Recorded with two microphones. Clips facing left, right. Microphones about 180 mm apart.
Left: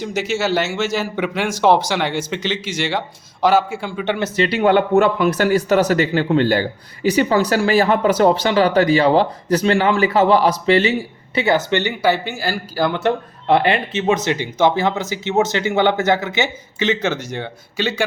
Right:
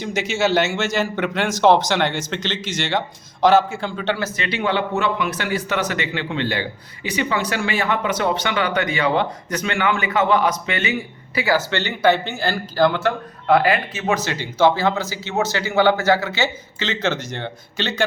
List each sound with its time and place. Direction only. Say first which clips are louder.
0.0 s speech: even; 5° left (ahead or behind)
4.4 s a man's voice: left 7 dB; 40° left (ahead or behind); by 18.0 s 10° left (ahead or behind)